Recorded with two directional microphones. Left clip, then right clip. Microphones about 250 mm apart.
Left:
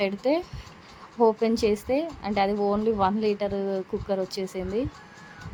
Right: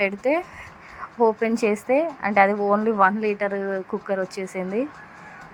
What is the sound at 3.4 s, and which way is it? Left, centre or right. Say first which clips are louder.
A woman's voice: right 3 dB; centre.